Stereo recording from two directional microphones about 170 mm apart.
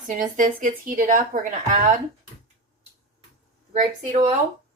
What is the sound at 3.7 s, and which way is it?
Speech, 40° right (ahead or behind).